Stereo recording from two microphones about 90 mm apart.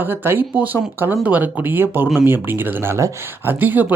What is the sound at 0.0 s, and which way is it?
Speech, 25° right (ahead or behind).